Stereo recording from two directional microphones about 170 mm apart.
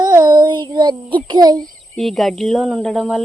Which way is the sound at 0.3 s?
30° right (ahead or behind).